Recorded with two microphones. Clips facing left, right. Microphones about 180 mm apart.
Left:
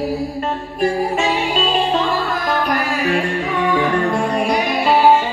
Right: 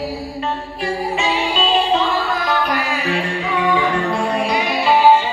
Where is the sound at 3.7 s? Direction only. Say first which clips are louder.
Left 2 dB; 45° left (ahead or behind).